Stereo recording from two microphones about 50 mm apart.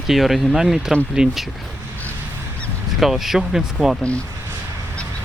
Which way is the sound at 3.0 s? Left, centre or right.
Centre.